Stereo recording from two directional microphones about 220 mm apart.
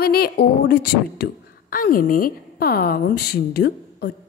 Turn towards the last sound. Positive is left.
turn(degrees=45)  # may be behind; listen again after turning